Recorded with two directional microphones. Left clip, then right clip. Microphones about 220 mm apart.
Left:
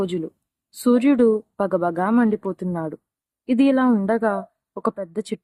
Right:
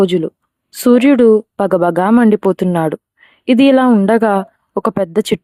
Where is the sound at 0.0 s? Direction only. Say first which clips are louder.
Right 12 dB; 30° right (ahead or behind).